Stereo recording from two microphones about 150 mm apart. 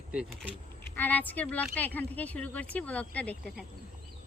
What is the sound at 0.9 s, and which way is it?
Speech, 10° left (ahead or behind).